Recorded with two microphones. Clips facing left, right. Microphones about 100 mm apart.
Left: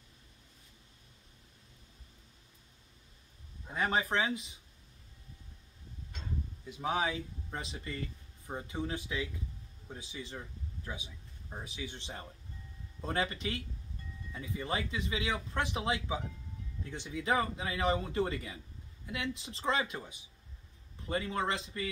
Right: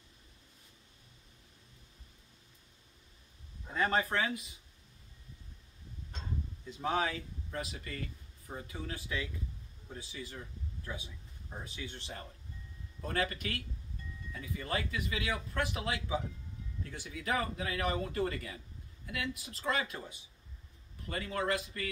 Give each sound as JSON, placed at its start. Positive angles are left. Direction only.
{"t": 3.6, "sound": "speech", "side_deg": 15}
{"t": 6.7, "sound": "speech", "side_deg": 15}